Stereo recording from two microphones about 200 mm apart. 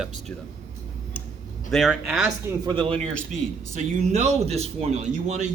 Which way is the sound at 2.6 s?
25° right (ahead or behind).